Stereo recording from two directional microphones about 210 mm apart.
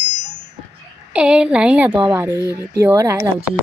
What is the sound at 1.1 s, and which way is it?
Speech, 5° right (ahead or behind).